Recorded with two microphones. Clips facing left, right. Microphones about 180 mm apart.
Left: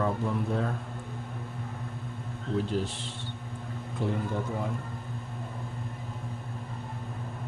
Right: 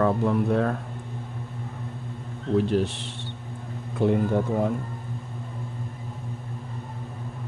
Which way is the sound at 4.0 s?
60° right (ahead or behind).